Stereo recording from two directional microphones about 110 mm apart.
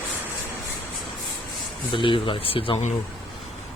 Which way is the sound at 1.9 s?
50° left (ahead or behind).